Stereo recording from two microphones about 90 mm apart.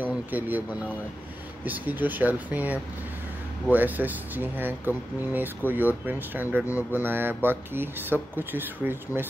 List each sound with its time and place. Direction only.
0.1 s speech: 20° right (ahead or behind)